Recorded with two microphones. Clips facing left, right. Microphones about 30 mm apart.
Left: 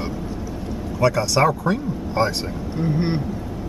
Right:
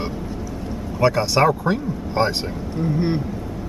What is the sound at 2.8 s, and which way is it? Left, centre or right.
Speech, left.